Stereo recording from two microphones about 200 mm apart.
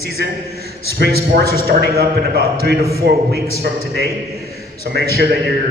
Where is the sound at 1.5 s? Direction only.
50° right (ahead or behind).